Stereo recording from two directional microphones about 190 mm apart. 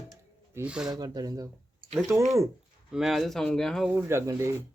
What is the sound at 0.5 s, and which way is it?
Speech, 5° right (ahead or behind).